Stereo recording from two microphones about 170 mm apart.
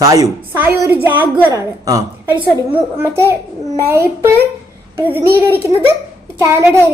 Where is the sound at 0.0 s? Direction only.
20° right (ahead or behind).